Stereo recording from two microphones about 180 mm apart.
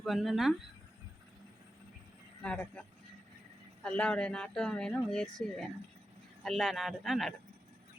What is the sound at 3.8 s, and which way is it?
Speech, 5° left (ahead or behind).